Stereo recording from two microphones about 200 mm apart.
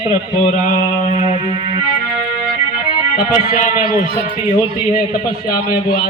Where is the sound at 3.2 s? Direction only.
40° left (ahead or behind).